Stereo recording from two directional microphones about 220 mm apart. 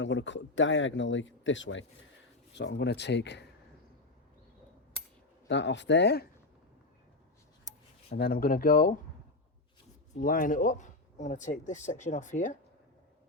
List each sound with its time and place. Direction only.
0.0 s speech: 55° left (ahead or behind)
5.5 s speech: 55° left (ahead or behind)
8.1 s speech: 45° left (ahead or behind)
10.2 s speech: 40° left (ahead or behind)